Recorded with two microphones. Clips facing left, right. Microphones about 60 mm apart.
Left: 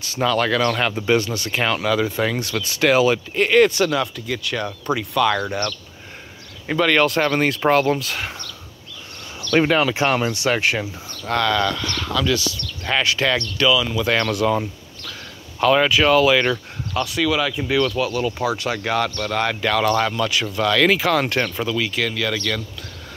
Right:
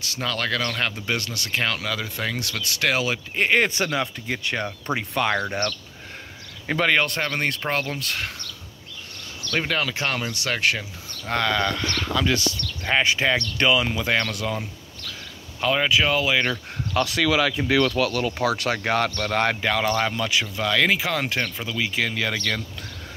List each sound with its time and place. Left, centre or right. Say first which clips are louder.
0.1 s speech: left 7 dB; centre
3.3 s speech: left 4 dB; centre
7.0 s speech: left 6 dB; centre
9.7 s speech: left 7 dB; left
11.2 s speech: left 3 dB; centre
13.6 s speech: left 3 dB; right
13.9 s speech: left 3 dB; centre
14.3 s speech: left 9 dB; centre
15.7 s speech: left 5 dB; centre
17.2 s speech: left 2 dB; right
18.9 s speech: left 2 dB; right
19.5 s speech: left 4 dB; centre
21.6 s speech: left 3 dB; centre